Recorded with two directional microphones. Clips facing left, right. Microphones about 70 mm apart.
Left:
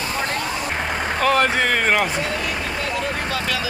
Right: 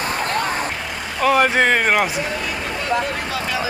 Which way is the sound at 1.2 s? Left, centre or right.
Centre.